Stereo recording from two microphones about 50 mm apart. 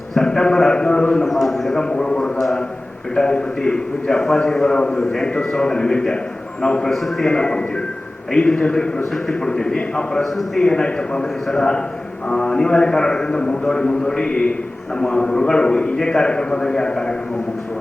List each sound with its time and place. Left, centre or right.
0.1 s a man's voice: centre
1.2 s a man's voice: centre
1.8 s a man's voice: centre
6.9 s a man's voice: centre